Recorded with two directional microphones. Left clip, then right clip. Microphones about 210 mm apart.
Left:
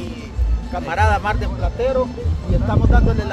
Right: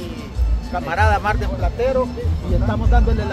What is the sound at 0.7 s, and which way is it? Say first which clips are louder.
Speech: even; 5° left (ahead or behind).